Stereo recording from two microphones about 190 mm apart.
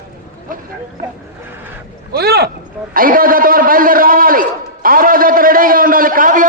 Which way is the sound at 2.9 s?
50° right (ahead or behind).